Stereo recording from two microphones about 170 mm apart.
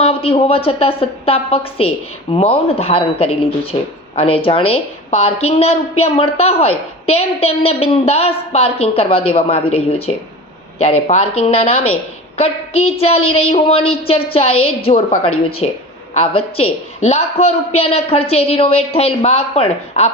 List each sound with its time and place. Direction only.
0.0 s speech: 35° left (ahead or behind)